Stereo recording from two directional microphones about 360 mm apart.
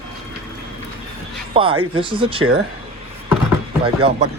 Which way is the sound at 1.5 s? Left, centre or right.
Centre.